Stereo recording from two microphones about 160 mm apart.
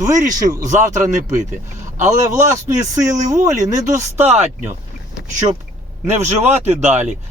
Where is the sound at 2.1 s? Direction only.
20° right (ahead or behind).